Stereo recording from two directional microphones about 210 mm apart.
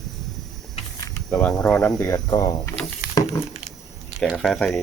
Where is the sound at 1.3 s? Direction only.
5° left (ahead or behind).